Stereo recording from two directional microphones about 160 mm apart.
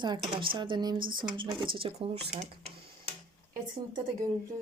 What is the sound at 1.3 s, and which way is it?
Speech, 30° right (ahead or behind).